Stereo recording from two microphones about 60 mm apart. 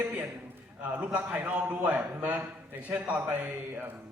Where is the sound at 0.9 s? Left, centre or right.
Right.